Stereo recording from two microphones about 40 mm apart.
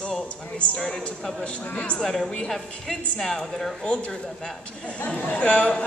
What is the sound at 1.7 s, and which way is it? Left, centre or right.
Speech, left.